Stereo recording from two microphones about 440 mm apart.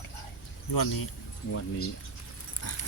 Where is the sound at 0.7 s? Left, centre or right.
Left.